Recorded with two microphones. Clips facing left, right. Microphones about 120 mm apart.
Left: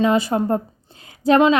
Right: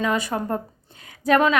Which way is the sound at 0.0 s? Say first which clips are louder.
Left 6 dB; 30° left (ahead or behind).